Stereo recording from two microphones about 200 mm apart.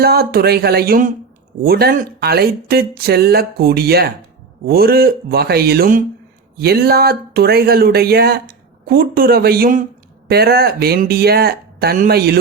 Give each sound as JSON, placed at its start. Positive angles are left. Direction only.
{"t": 0.0, "sound": "speech", "side_deg": -50}